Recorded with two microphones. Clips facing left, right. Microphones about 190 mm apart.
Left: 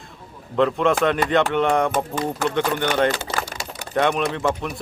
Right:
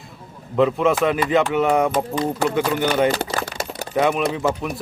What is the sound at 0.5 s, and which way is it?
Speech, 5° right (ahead or behind).